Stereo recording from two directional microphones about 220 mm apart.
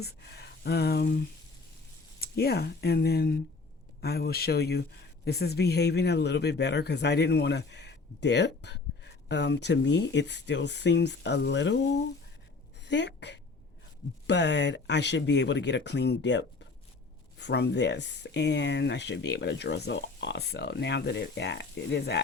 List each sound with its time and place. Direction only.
0.0 s speech: 50° left (ahead or behind)
2.2 s a woman's voice: 45° left (ahead or behind)